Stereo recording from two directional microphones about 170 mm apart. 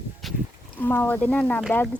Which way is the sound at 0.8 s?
10° left (ahead or behind).